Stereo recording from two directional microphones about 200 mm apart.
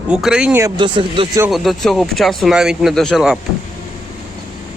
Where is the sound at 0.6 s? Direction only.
25° right (ahead or behind).